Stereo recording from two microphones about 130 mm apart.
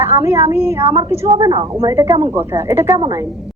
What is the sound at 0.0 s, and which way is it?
Speech, 20° right (ahead or behind).